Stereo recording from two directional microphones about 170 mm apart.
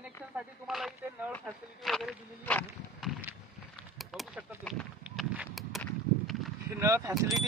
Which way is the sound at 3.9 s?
Centre (ahead or behind).